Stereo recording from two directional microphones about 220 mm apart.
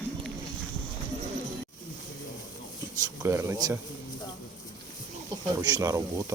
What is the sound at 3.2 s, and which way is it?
Speech, 10° right (ahead or behind).